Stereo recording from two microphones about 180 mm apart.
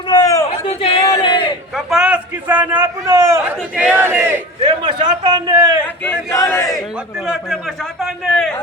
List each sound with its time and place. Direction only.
0.1 s a sound: 20° left (ahead or behind)
0.5 s a sound: 35° left (ahead or behind)
1.7 s a man's voice: 5° right (ahead or behind)
4.6 s a man's voice: 25° right (ahead or behind)
5.8 s speech: 5° left (ahead or behind)
6.4 s speech: 20° left (ahead or behind)
8.0 s a man's voice: centre (ahead or behind)